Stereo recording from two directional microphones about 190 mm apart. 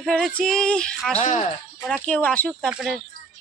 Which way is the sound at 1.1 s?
40° left (ahead or behind).